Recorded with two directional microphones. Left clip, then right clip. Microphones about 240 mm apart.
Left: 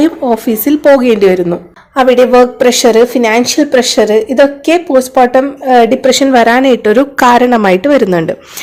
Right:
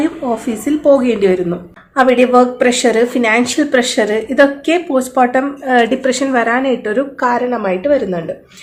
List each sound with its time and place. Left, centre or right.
0.0 s speech: left